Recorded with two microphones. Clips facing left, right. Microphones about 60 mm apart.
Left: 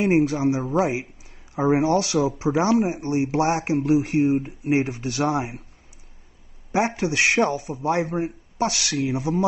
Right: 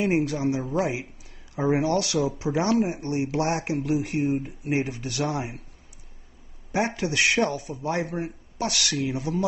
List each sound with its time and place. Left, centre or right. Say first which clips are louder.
0.0 s speech: left 4 dB; left
6.7 s speech: left 3 dB; left